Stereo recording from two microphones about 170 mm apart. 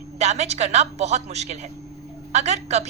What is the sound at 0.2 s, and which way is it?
A woman's voice, 40° right (ahead or behind).